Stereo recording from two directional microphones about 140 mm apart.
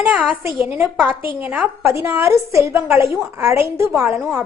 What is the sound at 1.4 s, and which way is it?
A woman's voice, 10° right (ahead or behind).